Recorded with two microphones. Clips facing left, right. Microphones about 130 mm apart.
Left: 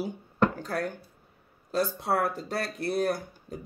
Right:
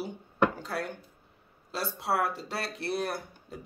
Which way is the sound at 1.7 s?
45° left (ahead or behind).